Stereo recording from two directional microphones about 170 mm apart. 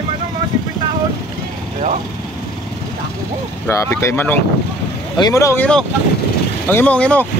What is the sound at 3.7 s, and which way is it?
Speech, 15° left (ahead or behind).